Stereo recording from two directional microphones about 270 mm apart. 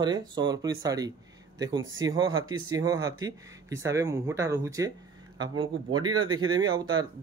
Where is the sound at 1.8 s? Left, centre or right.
Right.